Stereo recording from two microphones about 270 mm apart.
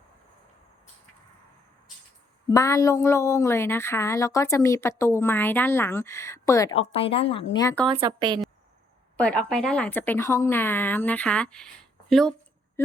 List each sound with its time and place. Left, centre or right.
2.6 s a woman's voice: centre
7.9 s speech: centre
9.1 s speech: centre